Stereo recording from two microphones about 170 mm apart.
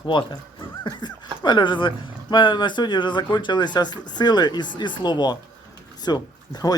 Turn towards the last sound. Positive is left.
turn(degrees=25)  # may be behind; listen again after turning